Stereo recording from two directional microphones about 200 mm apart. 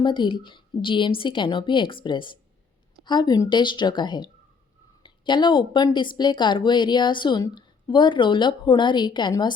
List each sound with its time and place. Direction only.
0.0 s a woman's voice: 25° left (ahead or behind)